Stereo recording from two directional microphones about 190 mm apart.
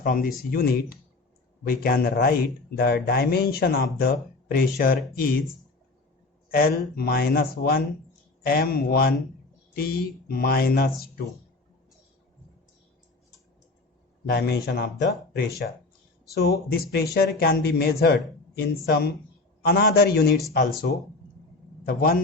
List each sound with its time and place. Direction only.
0.0 s speech: 50° left (ahead or behind)
6.5 s speech: 55° left (ahead or behind)
14.3 s speech: 55° left (ahead or behind)
21.8 s speech: 50° left (ahead or behind)